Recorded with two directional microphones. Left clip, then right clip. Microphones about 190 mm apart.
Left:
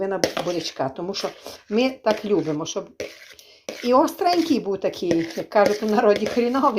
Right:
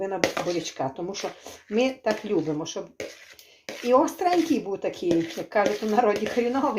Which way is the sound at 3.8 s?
30° left (ahead or behind).